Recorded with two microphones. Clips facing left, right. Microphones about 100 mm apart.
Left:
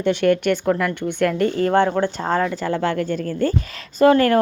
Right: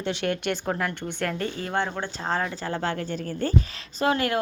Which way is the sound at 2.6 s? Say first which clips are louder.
Left 7 dB; 80° left.